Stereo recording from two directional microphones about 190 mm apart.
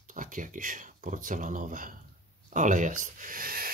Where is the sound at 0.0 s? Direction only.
45° right (ahead or behind).